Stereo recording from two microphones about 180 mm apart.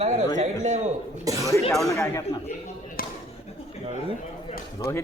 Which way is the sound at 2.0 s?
20° left (ahead or behind).